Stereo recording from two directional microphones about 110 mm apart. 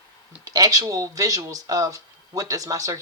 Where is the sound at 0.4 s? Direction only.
35° right (ahead or behind).